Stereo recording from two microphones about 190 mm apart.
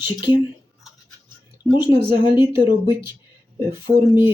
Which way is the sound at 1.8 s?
25° left (ahead or behind).